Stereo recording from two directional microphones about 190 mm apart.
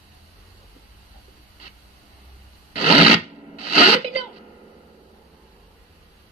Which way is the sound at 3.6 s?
30° right (ahead or behind).